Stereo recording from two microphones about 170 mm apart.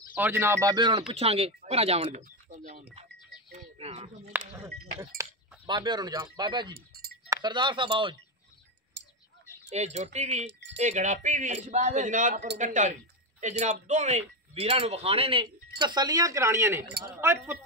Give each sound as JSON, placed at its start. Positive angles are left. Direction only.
{"t": 0.1, "sound": "speech", "side_deg": -10}
{"t": 3.5, "sound": "speech", "side_deg": -40}
{"t": 4.3, "sound": "speech", "side_deg": -10}
{"t": 9.0, "sound": "a sound", "side_deg": -90}
{"t": 9.7, "sound": "speech", "side_deg": -40}